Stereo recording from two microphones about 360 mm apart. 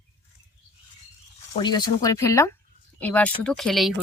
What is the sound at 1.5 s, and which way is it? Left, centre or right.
A woman's voice, centre.